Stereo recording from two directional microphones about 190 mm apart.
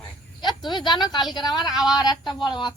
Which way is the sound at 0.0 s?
25° left (ahead or behind).